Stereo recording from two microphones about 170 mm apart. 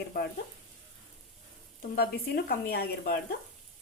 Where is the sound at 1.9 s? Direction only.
60° left (ahead or behind).